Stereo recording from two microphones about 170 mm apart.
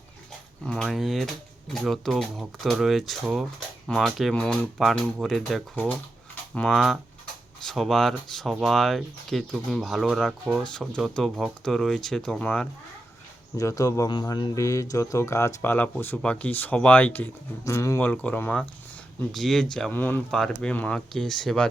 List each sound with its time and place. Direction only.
0.6 s speech: centre (ahead or behind)
13.6 s speech: 20° left (ahead or behind); by 21.7 s 5° left (ahead or behind)